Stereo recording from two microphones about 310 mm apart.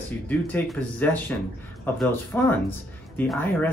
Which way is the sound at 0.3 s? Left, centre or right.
Centre.